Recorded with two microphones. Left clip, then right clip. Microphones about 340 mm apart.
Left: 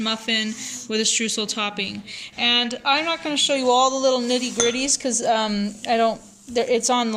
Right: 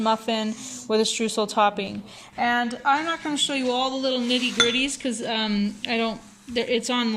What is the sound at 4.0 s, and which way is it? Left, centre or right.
Speech, left.